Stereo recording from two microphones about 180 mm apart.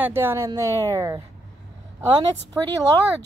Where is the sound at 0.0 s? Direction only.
10° right (ahead or behind).